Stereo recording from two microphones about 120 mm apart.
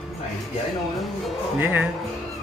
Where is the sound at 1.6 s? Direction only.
15° right (ahead or behind).